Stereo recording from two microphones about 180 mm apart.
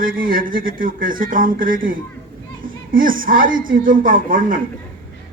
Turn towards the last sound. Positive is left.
turn(degrees=-50)  # may be behind; listen again after turning